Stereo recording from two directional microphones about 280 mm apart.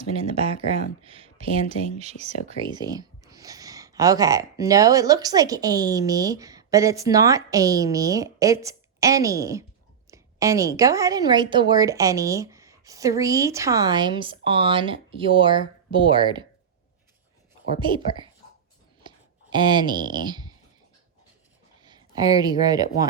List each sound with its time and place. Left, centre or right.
0.0 s speech: right
17.7 s speech: centre
19.0 s a sound: centre
21.8 s speech: centre